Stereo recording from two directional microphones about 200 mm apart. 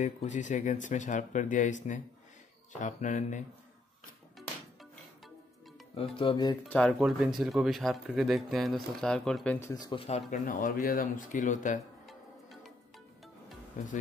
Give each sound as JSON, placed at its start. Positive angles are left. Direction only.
{"t": 0.0, "sound": "speech", "side_deg": 35}
{"t": 5.9, "sound": "speech", "side_deg": 25}
{"t": 6.6, "sound": "speech", "side_deg": 5}
{"t": 12.1, "sound": "music", "side_deg": 0}
{"t": 13.8, "sound": "speech", "side_deg": 35}